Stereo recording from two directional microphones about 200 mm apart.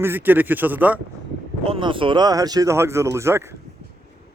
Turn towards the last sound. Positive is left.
turn(degrees=-15)  # may be behind; listen again after turning